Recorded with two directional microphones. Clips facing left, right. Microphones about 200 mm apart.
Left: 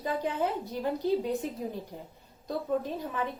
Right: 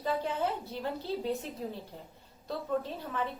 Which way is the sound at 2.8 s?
15° left (ahead or behind).